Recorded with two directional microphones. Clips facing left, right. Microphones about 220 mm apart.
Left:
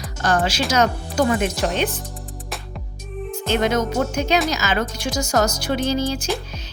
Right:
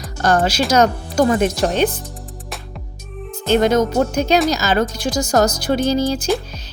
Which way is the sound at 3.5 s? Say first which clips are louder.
Right 6 dB; 40° right (ahead or behind).